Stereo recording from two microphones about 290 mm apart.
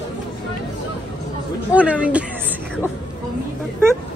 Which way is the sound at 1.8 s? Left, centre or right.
Centre.